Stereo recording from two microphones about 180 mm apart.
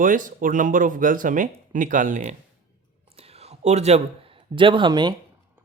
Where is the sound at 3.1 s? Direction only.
35° right (ahead or behind).